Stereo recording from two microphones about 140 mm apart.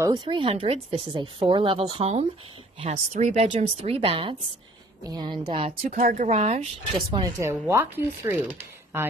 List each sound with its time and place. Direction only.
0.0 s speech: 30° right (ahead or behind); by 2.2 s 45° right (ahead or behind)
2.8 s speech: 55° right (ahead or behind)
5.0 s speech: 30° right (ahead or behind)
5.9 s speech: 75° right (ahead or behind); by 6.7 s 50° right (ahead or behind)
7.3 s speech: 20° right (ahead or behind)